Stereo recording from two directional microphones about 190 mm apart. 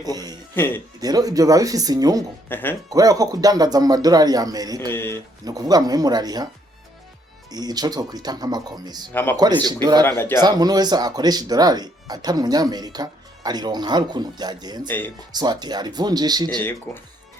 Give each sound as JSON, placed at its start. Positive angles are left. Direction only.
{"t": 0.0, "sound": "speech", "side_deg": -20}
{"t": 0.5, "sound": "speech", "side_deg": 10}
{"t": 0.9, "sound": "speech", "side_deg": -20}
{"t": 2.5, "sound": "speech", "side_deg": 10}
{"t": 2.9, "sound": "speech", "side_deg": -20}
{"t": 4.9, "sound": "speech", "side_deg": 10}
{"t": 5.5, "sound": "speech", "side_deg": -20}
{"t": 7.5, "sound": "speech", "side_deg": -20}
{"t": 10.0, "sound": "speech", "side_deg": 10}
{"t": 10.4, "sound": "speech", "side_deg": -20}
{"t": 14.8, "sound": "speech", "side_deg": 10}
{"t": 15.3, "sound": "speech", "side_deg": -20}
{"t": 16.9, "sound": "speech", "side_deg": 0}